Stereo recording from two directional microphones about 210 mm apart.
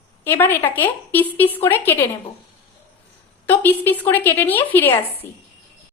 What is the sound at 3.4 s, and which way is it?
A woman's voice, 10° left (ahead or behind).